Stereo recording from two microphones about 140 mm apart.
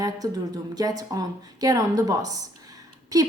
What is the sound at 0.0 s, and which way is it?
A woman's voice, 25° right (ahead or behind).